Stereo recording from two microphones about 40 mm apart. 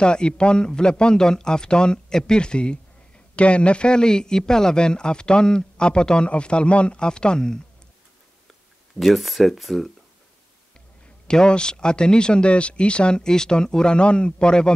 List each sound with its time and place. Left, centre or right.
0.0 s a man's voice: left
9.0 s speech: centre
11.2 s a man's voice: centre